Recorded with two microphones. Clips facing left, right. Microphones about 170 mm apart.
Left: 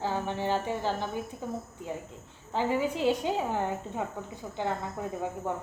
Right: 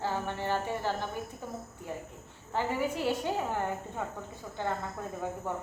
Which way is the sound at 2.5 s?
15° left (ahead or behind).